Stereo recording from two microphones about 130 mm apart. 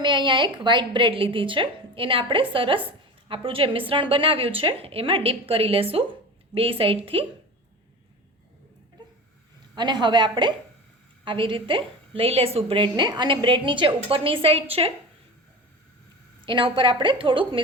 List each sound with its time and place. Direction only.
0.0 s a woman's voice: 35° right (ahead or behind)
9.7 s a woman's voice: 35° right (ahead or behind)
16.5 s a woman's voice: 40° right (ahead or behind)